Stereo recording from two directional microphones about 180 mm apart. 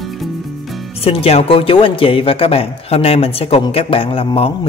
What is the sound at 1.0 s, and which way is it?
Speech, 35° left (ahead or behind).